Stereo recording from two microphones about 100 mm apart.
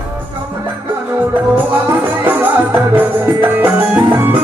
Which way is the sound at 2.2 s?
20° right (ahead or behind).